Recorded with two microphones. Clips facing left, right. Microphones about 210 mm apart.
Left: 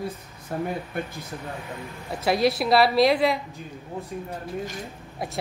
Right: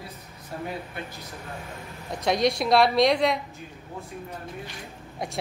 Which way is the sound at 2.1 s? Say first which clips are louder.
Left 1 dB; 5° left (ahead or behind).